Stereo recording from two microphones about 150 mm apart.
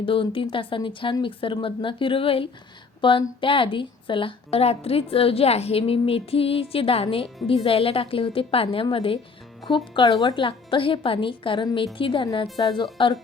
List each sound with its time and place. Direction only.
0.0 s a woman's voice: 35° left (ahead or behind)